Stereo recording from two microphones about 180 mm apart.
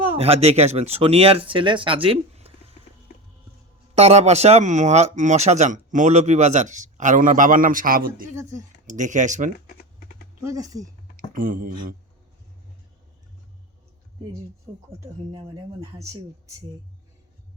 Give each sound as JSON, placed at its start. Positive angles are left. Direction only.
{"t": 0.2, "sound": "speech", "side_deg": -35}
{"t": 3.9, "sound": "speech", "side_deg": -35}
{"t": 10.4, "sound": "speech", "side_deg": -20}
{"t": 11.2, "sound": "speech", "side_deg": -50}
{"t": 15.0, "sound": "speech", "side_deg": -25}